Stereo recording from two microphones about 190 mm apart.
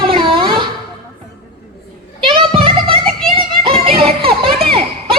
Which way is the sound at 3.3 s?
30° right (ahead or behind).